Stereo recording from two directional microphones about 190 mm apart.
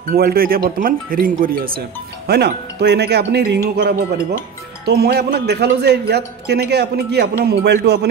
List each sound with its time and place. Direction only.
0.1 s a man's voice: 50° right (ahead or behind)